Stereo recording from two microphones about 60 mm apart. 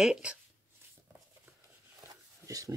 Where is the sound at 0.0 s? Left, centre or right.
Centre.